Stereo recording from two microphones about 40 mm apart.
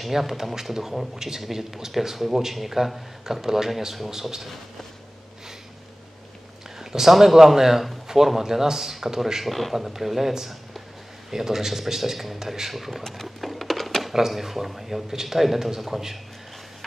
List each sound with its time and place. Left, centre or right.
0.0 s speech: centre
6.8 s speech: centre
13.0 s a sound: centre
14.1 s speech: centre